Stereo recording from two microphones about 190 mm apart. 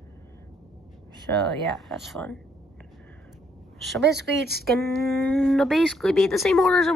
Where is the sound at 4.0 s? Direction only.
60° right (ahead or behind).